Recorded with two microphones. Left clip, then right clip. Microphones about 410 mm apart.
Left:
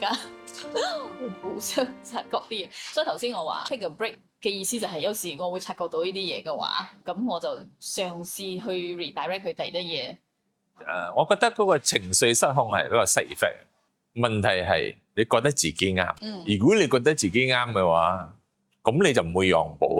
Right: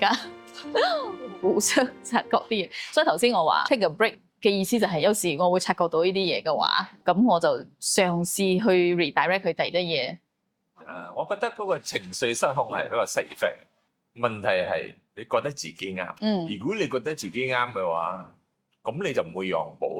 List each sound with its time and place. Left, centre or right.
0.7 s speech: right
1.5 s speech: right
10.8 s speech: left